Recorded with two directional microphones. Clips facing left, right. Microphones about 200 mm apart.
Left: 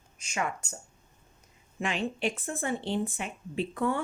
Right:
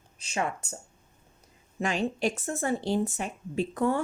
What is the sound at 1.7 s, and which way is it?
Speech, 40° right (ahead or behind).